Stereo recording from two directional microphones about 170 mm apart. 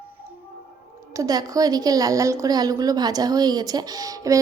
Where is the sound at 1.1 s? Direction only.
20° right (ahead or behind).